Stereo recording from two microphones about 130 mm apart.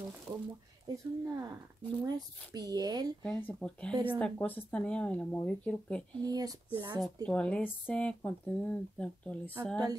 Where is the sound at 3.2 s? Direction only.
10° left (ahead or behind).